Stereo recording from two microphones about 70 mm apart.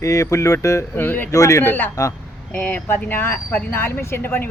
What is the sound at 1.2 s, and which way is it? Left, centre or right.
Speech, left.